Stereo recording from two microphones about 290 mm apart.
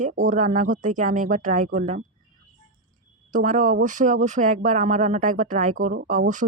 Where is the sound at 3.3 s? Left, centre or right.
Right.